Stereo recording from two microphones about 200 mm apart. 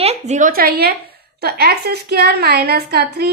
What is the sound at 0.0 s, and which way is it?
A woman's voice, 35° right (ahead or behind).